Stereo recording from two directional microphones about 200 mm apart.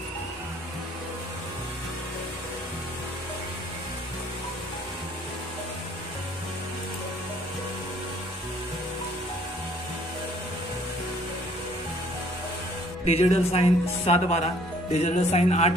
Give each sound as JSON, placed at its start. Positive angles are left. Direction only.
{"t": 13.0, "sound": "speech", "side_deg": 30}